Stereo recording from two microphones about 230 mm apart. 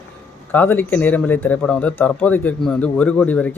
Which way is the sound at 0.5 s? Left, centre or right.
Centre.